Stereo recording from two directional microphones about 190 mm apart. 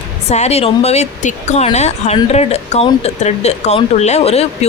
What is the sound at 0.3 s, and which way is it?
Speech, 35° left (ahead or behind).